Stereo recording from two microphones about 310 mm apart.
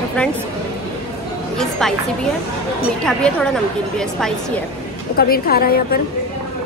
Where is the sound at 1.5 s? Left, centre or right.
Centre.